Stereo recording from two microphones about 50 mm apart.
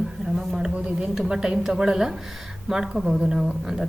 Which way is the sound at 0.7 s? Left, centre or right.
Right.